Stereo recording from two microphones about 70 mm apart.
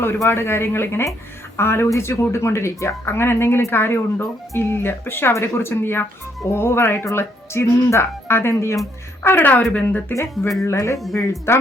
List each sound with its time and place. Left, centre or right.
0.3 s speech: left
10.6 s speech: left
10.9 s speech: centre
11.2 s speech: left